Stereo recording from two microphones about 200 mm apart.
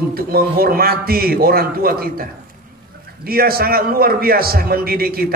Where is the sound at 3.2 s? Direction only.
50° right (ahead or behind).